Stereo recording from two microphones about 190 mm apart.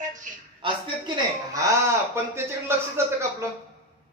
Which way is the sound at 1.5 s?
15° right (ahead or behind).